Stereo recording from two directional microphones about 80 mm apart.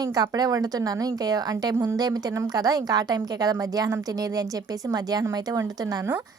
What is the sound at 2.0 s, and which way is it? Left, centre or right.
A woman's voice, right.